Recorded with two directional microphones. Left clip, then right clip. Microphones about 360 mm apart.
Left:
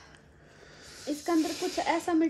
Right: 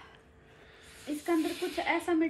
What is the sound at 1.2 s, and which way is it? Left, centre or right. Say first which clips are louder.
Speech: left 2 dB; left.